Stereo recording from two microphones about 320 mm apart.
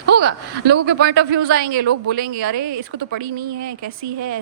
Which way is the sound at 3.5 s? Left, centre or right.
Right.